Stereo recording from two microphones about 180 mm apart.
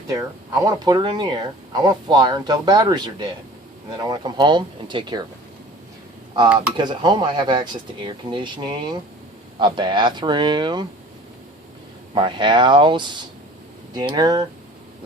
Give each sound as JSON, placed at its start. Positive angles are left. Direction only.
{"t": 0.1, "sound": "speech", "side_deg": -20}
{"t": 4.1, "sound": "speech", "side_deg": -25}
{"t": 6.7, "sound": "speech", "side_deg": -25}
{"t": 12.1, "sound": "speech", "side_deg": -25}